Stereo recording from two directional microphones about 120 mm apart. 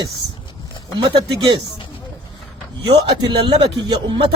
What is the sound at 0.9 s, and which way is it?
Speech, 40° right (ahead or behind).